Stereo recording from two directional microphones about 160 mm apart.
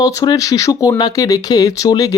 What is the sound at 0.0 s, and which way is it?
Speech, 20° left (ahead or behind).